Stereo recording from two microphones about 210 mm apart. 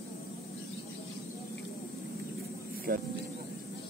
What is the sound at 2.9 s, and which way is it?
Speech, 45° right (ahead or behind).